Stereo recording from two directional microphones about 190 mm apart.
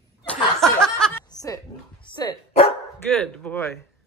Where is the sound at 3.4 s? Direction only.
10° left (ahead or behind).